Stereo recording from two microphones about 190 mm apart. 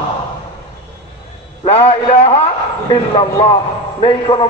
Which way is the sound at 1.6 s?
30° left (ahead or behind).